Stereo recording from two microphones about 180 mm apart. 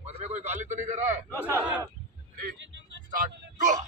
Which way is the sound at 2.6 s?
85° right.